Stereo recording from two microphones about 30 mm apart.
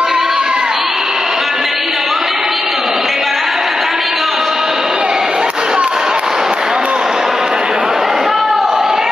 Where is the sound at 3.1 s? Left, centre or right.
Centre.